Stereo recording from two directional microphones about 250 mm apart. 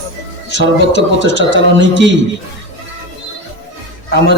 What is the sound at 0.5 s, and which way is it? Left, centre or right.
A man's voice, right.